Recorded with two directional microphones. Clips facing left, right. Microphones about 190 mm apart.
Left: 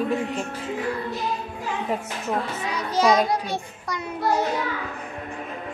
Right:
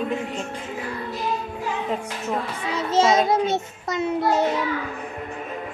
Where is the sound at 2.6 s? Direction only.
25° right (ahead or behind).